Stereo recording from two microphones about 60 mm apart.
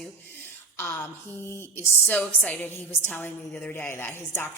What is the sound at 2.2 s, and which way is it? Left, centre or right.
Speech, left.